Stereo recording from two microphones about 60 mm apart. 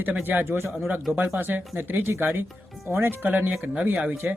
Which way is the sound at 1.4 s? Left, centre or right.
Right.